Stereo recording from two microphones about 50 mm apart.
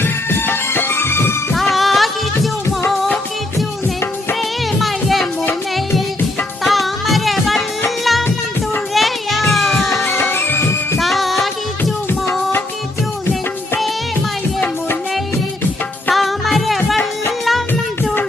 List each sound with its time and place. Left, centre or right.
0.0 s music: left
1.5 s music: centre
4.8 s music: centre
6.7 s music: centre
10.1 s music: left
10.9 s music: centre
16.1 s music: centre